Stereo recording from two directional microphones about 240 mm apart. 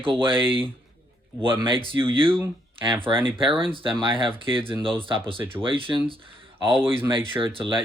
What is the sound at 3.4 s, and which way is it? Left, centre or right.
Speech, right.